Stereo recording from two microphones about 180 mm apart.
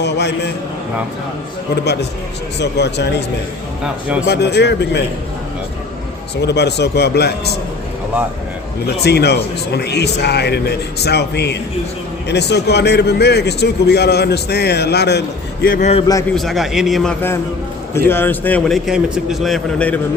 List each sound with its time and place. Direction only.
0.0 s a man's voice: 70° left (ahead or behind)
1.7 s a man's voice: 65° left (ahead or behind)
4.3 s a man's voice: 70° left (ahead or behind)
6.3 s a man's voice: 70° left (ahead or behind)
9.0 s a man's voice: 65° left (ahead or behind)
15.6 s a man's voice: 50° left (ahead or behind)
16.3 s a man's voice: centre (ahead or behind)
18.1 s a man's voice: 10° left (ahead or behind)